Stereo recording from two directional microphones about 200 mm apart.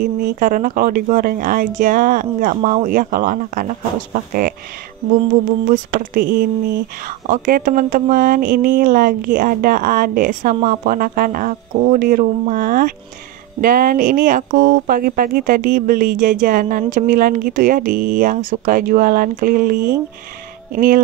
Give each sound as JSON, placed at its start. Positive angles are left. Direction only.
{"t": 0.0, "sound": "speech", "side_deg": -45}
{"t": 5.7, "sound": "speech", "side_deg": -45}